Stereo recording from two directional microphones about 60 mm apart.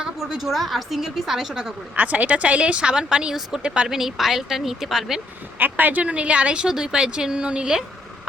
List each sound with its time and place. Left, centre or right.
0.0 s a woman's voice: centre
2.0 s a woman's voice: right; by 5.2 s centre
5.5 s a woman's voice: right; by 8.3 s centre